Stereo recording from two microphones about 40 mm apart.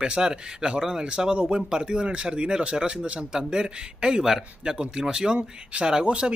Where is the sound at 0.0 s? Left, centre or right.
Centre.